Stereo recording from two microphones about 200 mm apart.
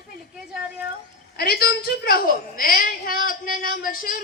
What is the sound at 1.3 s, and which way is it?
A woman's voice, 50° left (ahead or behind).